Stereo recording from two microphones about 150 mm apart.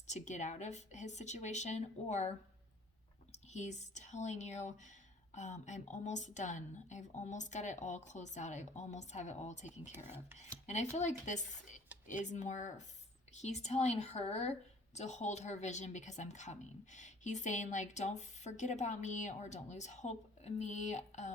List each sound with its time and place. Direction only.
0.1 s a woman's voice: 55° left (ahead or behind)
3.5 s a woman's voice: 50° left (ahead or behind)
9.9 s speech: 15° right (ahead or behind)
10.7 s a woman's voice: 50° left (ahead or behind)